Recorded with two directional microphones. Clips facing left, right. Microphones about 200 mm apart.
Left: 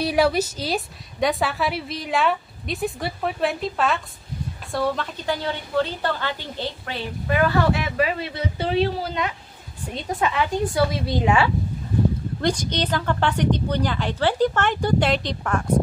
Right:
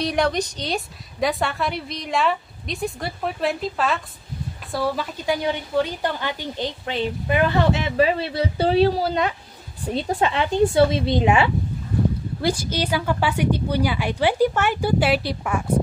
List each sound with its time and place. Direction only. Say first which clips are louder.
0.0 s a woman's voice: left 2 dB; 5° left (ahead or behind); by 11.5 s 20° right (ahead or behind)
12.4 s a woman's voice: right 1 dB; 5° right (ahead or behind)